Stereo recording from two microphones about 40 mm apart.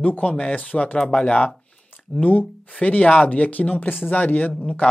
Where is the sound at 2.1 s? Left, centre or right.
Left.